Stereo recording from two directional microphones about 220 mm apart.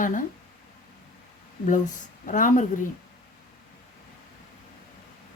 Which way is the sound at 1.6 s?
35° left (ahead or behind).